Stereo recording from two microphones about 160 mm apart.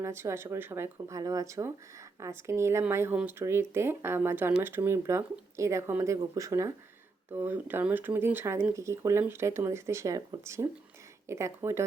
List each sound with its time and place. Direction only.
0.0 s speech: 15° right (ahead or behind)